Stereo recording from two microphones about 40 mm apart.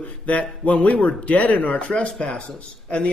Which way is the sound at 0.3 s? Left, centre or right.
Left.